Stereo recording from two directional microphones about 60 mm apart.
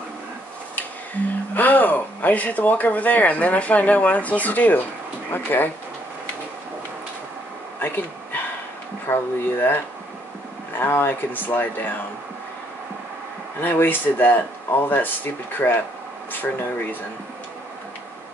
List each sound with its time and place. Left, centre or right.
0.7 s speech: left
7.8 s a sound: left
9.0 s speech: left
10.8 s speech: left
13.6 s speech: left